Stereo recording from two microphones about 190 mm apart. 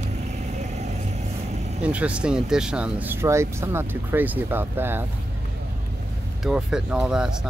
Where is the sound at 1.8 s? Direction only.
5° right (ahead or behind).